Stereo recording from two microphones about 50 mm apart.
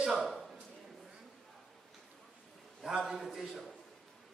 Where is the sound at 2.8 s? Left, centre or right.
Centre.